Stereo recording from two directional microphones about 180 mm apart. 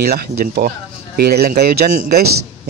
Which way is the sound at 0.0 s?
55° right (ahead or behind).